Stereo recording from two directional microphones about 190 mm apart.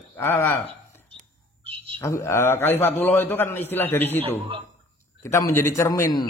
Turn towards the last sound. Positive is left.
turn(degrees=15)  # may be behind; listen again after turning